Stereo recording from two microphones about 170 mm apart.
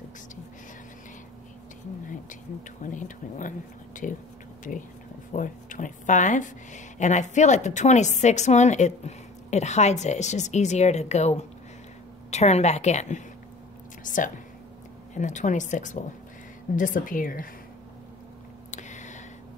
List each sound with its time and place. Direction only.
2.8 s speech: 50° left (ahead or behind)
5.3 s a woman's voice: 50° left (ahead or behind)
18.7 s a sound: 45° left (ahead or behind)